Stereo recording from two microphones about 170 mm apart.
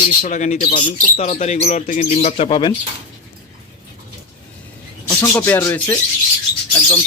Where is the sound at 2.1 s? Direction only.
35° left (ahead or behind).